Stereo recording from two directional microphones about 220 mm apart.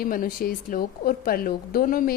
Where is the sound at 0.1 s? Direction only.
40° left (ahead or behind).